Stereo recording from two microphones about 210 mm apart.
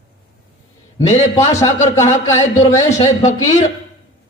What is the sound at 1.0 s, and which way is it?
Speech, 35° left (ahead or behind).